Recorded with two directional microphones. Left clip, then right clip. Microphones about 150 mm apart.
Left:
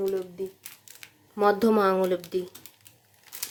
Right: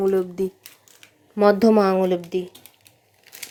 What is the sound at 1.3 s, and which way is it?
Speech, 25° right (ahead or behind).